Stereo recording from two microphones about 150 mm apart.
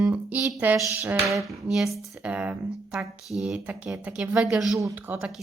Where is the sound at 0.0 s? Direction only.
10° right (ahead or behind).